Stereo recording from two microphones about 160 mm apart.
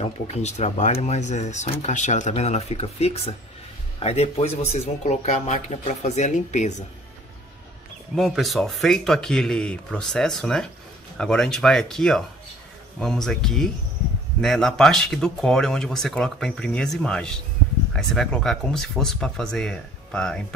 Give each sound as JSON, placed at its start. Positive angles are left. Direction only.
{"t": 0.0, "sound": "speech", "side_deg": 45}
{"t": 8.2, "sound": "speech", "side_deg": 0}